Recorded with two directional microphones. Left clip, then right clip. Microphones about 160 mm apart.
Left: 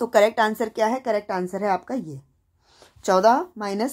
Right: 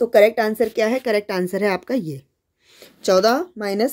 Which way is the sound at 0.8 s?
25° right (ahead or behind).